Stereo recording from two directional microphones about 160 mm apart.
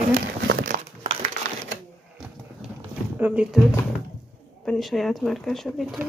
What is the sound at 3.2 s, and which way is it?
Speech, 5° right (ahead or behind).